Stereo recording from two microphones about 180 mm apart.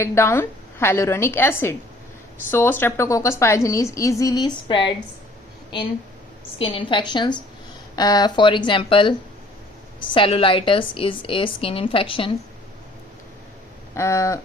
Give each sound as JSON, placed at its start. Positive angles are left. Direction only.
{"t": 0.0, "sound": "a woman's voice", "side_deg": 15}
{"t": 6.6, "sound": "a woman's voice", "side_deg": 30}
{"t": 13.9, "sound": "a woman's voice", "side_deg": 15}